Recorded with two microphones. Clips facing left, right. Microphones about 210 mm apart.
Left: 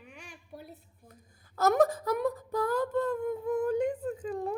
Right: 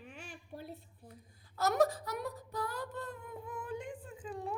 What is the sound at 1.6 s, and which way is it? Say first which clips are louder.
Wail: left 6 dB; 50° left (ahead or behind).